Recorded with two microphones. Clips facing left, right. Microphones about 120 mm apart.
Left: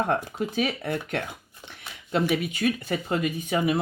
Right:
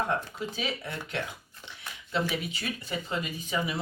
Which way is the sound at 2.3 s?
55° left (ahead or behind).